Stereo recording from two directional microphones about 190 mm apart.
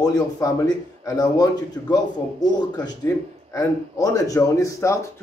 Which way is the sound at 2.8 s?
20° left (ahead or behind).